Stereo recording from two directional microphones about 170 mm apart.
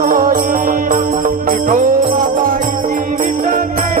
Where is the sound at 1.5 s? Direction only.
55° right (ahead or behind).